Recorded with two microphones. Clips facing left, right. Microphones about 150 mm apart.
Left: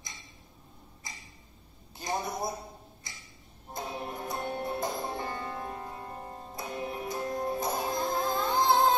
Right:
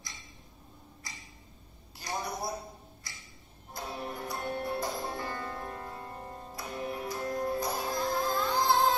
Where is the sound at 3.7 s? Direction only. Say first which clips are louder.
Left 1 dB; 20° left (ahead or behind).